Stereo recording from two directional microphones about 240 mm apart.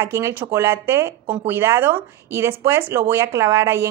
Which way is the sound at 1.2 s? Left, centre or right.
Right.